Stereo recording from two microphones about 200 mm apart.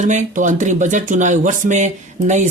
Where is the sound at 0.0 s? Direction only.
40° right (ahead or behind).